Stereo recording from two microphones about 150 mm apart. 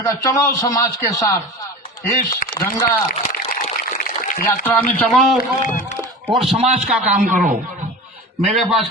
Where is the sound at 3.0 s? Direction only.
70° left (ahead or behind).